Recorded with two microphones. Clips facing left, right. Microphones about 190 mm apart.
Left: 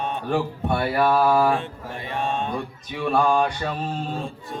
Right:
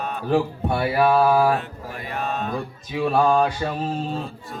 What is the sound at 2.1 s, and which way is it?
Mantra, 25° left (ahead or behind).